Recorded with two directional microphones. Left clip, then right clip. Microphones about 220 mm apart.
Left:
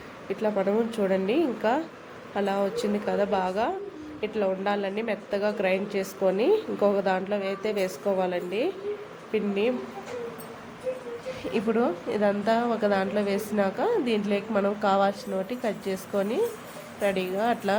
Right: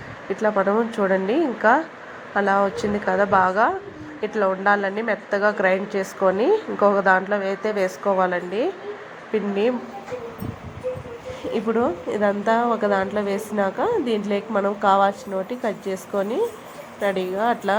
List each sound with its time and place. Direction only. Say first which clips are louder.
0.4 s a woman's voice: right 6 dB; centre (ahead or behind)
11.5 s a woman's voice: right 4 dB; 5° right (ahead or behind)